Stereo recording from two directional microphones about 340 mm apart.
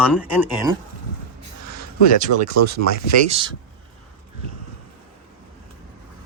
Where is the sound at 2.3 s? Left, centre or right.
Right.